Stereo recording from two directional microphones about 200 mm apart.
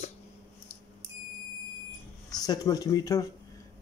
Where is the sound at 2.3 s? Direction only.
20° left (ahead or behind).